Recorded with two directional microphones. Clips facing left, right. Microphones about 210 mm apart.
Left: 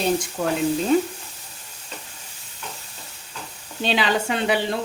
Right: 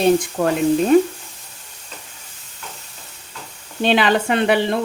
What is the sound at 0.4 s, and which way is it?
Speech, 60° right (ahead or behind).